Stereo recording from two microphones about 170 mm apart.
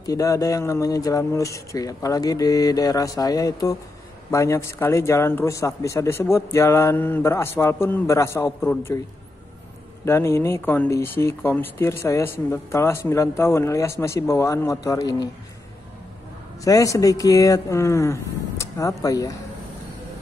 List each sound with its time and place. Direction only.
0.0 s speech: 20° left (ahead or behind)
10.0 s speech: 15° left (ahead or behind)
16.6 s speech: 20° left (ahead or behind)